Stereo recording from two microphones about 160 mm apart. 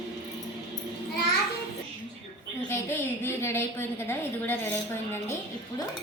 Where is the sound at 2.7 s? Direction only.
15° left (ahead or behind).